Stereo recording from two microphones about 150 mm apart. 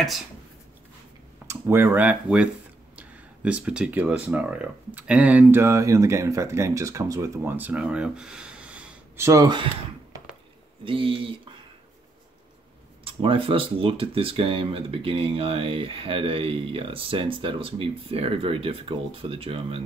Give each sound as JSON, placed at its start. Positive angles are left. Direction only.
{"t": 1.5, "sound": "speech", "side_deg": -15}
{"t": 10.8, "sound": "speech", "side_deg": -35}
{"t": 13.0, "sound": "speech", "side_deg": -35}